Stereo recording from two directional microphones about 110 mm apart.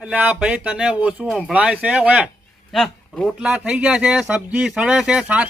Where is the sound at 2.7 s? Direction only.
5° left (ahead or behind).